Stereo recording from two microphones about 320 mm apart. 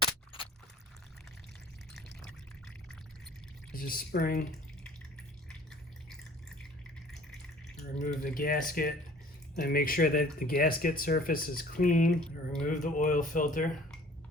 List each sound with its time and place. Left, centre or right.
3.7 s speech: left
8.0 s speech: left